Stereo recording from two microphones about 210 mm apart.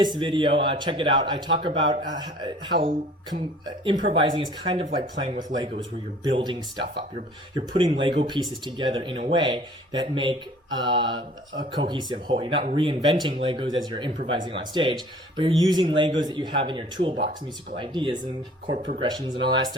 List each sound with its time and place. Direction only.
0.0 s speech: 20° right (ahead or behind)
2.7 s speech: 50° right (ahead or behind)
3.8 s speech: 25° right (ahead or behind)